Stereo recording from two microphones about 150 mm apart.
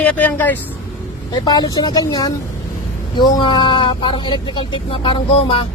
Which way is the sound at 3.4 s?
30° left (ahead or behind).